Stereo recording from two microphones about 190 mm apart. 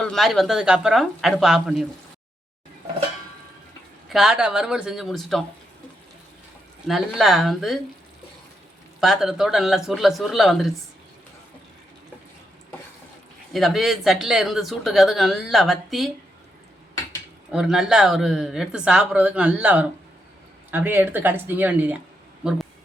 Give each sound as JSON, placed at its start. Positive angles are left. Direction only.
{"t": 0.0, "sound": "speech", "side_deg": 0}
{"t": 4.1, "sound": "speech", "side_deg": 0}
{"t": 6.8, "sound": "speech", "side_deg": 0}
{"t": 9.0, "sound": "speech", "side_deg": 0}
{"t": 13.5, "sound": "speech", "side_deg": 0}
{"t": 17.5, "sound": "speech", "side_deg": -5}